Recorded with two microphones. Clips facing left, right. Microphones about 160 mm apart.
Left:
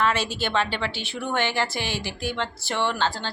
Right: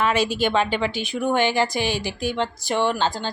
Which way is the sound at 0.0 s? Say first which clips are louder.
Right 4 dB; 15° right (ahead or behind).